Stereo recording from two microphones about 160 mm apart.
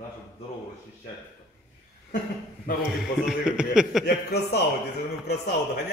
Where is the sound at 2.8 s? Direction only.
5° right (ahead or behind).